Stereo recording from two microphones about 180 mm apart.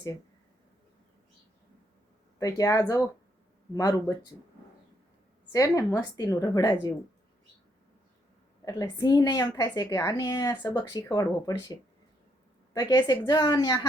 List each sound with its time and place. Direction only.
2.4 s a woman's voice: 20° left (ahead or behind)
5.5 s a woman's voice: 20° left (ahead or behind)
8.6 s a woman's voice: 20° left (ahead or behind)